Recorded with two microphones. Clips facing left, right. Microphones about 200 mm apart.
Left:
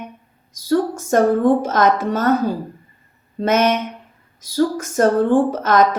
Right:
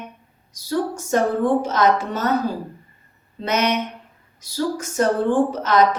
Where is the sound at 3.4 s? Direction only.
50° left (ahead or behind).